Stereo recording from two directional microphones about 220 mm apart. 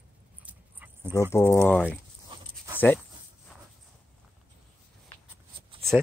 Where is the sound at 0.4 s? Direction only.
10° right (ahead or behind).